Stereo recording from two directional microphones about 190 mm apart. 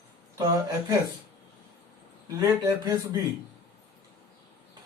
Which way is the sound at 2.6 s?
15° right (ahead or behind).